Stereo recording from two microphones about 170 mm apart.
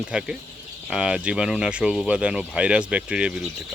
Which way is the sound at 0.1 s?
5° right (ahead or behind).